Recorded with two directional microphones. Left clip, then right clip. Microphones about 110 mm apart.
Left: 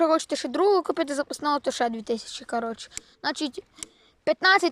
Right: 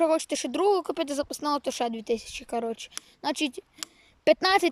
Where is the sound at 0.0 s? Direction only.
15° right (ahead or behind).